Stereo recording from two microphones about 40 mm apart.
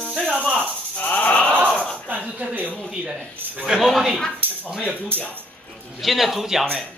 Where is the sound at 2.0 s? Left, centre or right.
Right.